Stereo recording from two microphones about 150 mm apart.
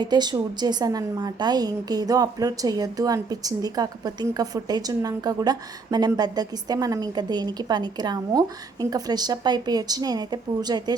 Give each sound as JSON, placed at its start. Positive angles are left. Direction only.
{"t": 0.0, "sound": "a woman's voice", "side_deg": -30}